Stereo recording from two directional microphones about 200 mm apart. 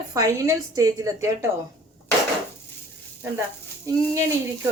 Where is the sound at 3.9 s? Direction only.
15° right (ahead or behind).